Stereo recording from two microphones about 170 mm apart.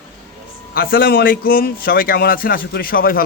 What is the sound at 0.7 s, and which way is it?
A man's voice, 60° left (ahead or behind).